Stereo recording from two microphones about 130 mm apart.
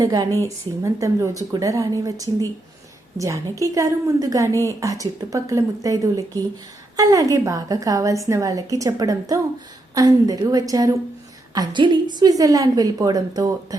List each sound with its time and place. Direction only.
0.0 s a woman's voice: 30° right (ahead or behind)